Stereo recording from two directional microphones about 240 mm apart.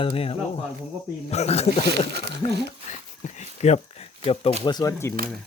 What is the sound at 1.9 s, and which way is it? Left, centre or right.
Speech, right.